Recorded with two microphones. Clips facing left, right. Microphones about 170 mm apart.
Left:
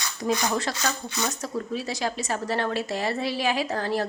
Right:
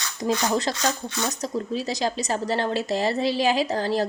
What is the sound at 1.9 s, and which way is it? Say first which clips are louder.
A woman's voice: right 3 dB; 35° right (ahead or behind).